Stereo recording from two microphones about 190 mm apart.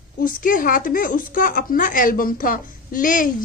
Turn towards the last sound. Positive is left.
turn(degrees=45)  # may be behind; listen again after turning